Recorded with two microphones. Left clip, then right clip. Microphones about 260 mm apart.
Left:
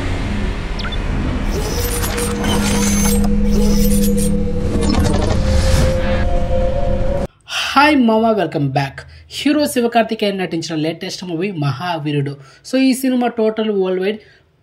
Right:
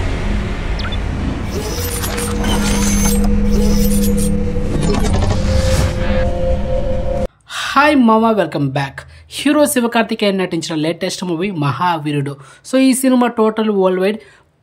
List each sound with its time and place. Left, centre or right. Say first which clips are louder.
2.4 s mechanisms: even; centre
5.8 s music: left 1 dB; centre
7.5 s a woman's voice: even; centre